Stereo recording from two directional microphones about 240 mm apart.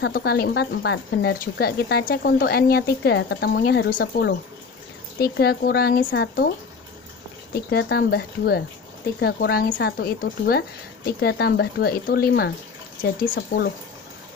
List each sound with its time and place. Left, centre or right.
0.0 s speech: left
7.5 s speech: left